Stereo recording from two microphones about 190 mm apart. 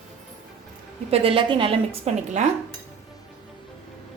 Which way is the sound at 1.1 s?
30° right (ahead or behind).